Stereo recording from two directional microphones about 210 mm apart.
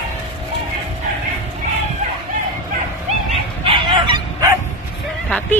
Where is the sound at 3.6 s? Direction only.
25° right (ahead or behind).